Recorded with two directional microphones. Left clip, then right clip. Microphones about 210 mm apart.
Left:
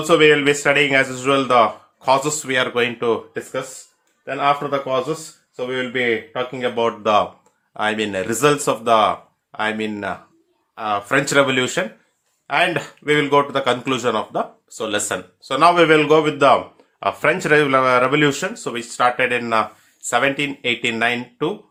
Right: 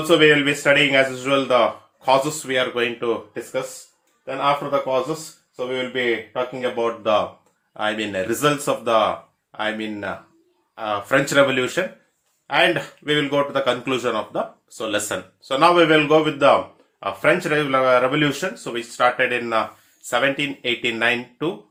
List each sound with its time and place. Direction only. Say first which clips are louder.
0.1 s speech: left 2 dB; 25° left (ahead or behind)
5.5 s speech: left 2 dB; 35° left (ahead or behind)
17.0 s speech: left 1 dB; 40° left (ahead or behind); by 21.5 s 25° left (ahead or behind)